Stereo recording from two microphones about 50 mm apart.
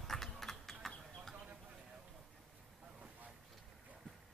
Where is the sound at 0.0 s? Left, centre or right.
Centre.